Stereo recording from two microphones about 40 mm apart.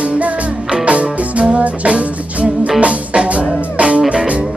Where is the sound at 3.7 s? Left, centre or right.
Right.